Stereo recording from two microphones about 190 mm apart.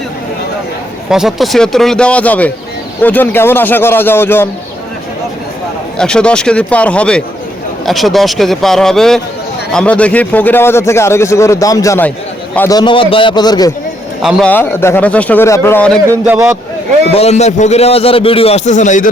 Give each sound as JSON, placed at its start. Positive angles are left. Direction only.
{"t": 1.1, "sound": "a man's voice", "side_deg": 0}
{"t": 6.0, "sound": "a man's voice", "side_deg": 5}
{"t": 14.2, "sound": "a man's voice", "side_deg": 0}
{"t": 14.5, "sound": "a man's voice", "side_deg": 10}
{"t": 16.0, "sound": "speech", "side_deg": -10}
{"t": 17.2, "sound": "a man's voice", "side_deg": 35}